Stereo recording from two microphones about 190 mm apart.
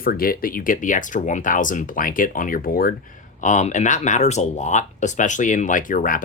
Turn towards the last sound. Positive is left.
turn(degrees=45)  # may be behind; listen again after turning